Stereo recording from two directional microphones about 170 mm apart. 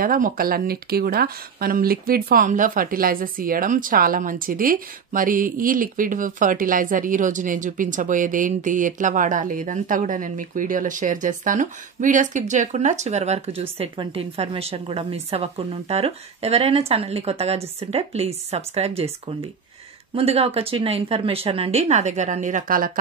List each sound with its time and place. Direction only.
0.0 s speech: 55° right (ahead or behind)